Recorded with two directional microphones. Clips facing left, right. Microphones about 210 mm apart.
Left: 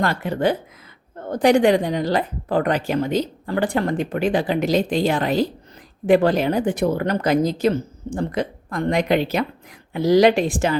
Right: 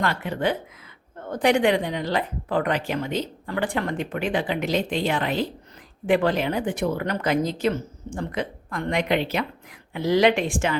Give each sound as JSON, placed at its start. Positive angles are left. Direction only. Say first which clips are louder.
{"t": 0.0, "sound": "a woman's voice", "louder": "left 4 dB", "side_deg": 40}